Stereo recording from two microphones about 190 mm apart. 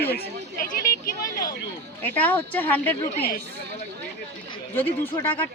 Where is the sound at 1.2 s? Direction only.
45° left (ahead or behind).